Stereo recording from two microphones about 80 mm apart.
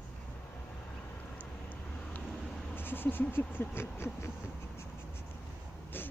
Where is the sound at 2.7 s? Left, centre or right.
Left.